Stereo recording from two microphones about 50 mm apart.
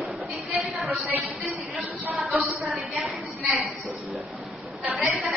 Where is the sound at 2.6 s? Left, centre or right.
Centre.